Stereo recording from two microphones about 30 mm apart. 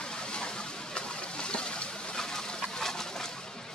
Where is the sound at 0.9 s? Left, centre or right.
Left.